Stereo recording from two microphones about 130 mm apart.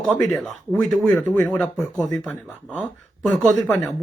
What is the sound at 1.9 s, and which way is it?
Speech, 30° left (ahead or behind).